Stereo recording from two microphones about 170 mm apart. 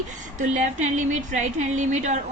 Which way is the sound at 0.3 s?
45° right (ahead or behind).